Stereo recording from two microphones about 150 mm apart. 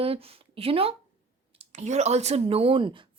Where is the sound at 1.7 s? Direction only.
50° right (ahead or behind); by 3.0 s 35° right (ahead or behind).